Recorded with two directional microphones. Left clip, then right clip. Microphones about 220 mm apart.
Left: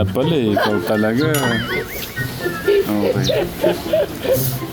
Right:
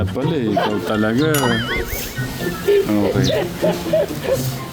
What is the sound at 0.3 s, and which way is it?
Speech, 30° left (ahead or behind).